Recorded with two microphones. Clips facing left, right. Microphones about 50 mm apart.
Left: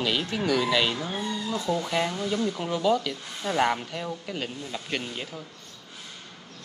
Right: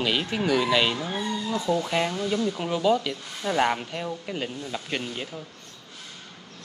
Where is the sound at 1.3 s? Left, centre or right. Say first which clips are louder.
Right 2 dB; right.